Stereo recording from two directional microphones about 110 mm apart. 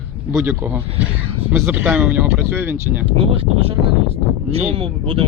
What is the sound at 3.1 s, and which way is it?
Speech, 60° right (ahead or behind).